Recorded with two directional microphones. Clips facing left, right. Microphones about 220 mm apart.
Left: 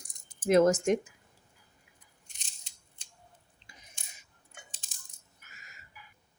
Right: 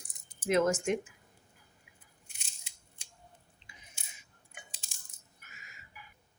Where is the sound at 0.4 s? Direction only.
40° left (ahead or behind).